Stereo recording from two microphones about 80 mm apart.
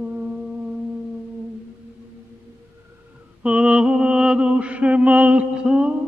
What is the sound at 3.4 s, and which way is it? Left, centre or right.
Mantra, centre.